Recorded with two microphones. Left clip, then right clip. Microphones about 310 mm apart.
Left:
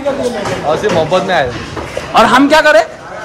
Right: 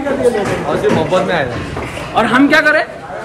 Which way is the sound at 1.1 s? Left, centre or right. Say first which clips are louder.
Left 2 dB; left.